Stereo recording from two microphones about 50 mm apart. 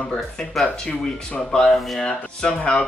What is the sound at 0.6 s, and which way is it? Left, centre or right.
Speech, centre.